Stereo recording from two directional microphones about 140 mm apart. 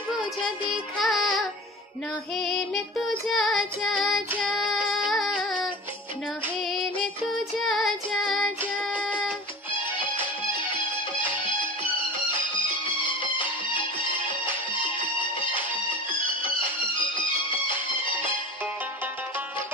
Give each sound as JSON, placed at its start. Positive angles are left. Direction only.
{"t": 0.9, "sound": "music", "side_deg": 0}
{"t": 2.3, "sound": "female singing", "side_deg": 0}
{"t": 4.5, "sound": "music", "side_deg": 0}
{"t": 6.6, "sound": "female singing", "side_deg": 0}
{"t": 7.3, "sound": "music", "side_deg": 0}
{"t": 17.8, "sound": "music", "side_deg": 40}